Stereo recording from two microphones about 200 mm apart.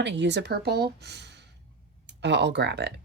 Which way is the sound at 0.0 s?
60° right (ahead or behind).